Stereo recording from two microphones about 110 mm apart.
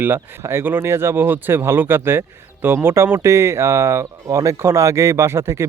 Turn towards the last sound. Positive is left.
turn(degrees=-25)  # may be behind; listen again after turning